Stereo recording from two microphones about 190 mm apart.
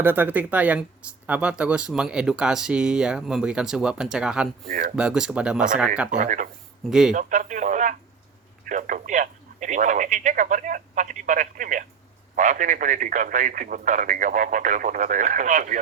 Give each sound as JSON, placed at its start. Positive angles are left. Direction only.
{"t": 0.0, "sound": "speech", "side_deg": -10}
{"t": 4.7, "sound": "speech", "side_deg": -45}
{"t": 4.9, "sound": "speech", "side_deg": -5}
{"t": 6.1, "sound": "speech", "side_deg": -40}